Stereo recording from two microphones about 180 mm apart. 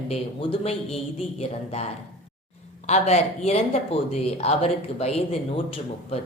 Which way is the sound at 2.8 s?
35° left (ahead or behind).